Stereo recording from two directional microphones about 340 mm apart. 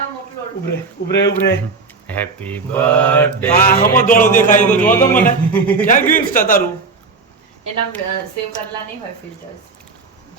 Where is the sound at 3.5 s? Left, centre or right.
Left.